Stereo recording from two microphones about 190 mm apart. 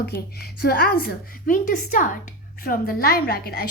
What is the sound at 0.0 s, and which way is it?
Speech, 55° left (ahead or behind).